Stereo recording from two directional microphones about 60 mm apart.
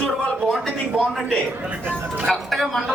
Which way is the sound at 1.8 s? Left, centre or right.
Right.